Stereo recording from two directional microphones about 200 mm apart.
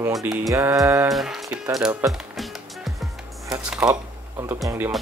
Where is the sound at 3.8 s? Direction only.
15° right (ahead or behind).